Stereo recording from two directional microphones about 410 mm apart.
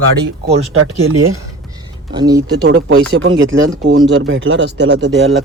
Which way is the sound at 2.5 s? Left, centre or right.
Right.